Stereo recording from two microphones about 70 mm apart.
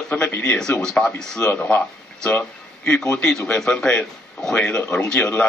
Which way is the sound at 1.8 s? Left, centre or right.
Centre.